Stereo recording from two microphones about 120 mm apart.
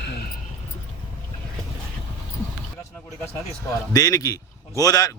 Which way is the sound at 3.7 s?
30° left (ahead or behind).